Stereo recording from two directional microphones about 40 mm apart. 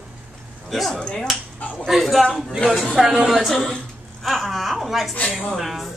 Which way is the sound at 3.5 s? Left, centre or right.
Centre.